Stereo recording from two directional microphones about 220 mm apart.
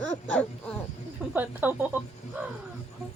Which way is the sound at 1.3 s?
10° right (ahead or behind).